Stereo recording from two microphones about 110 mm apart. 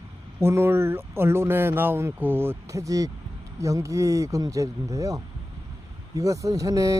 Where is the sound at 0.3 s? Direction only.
20° right (ahead or behind).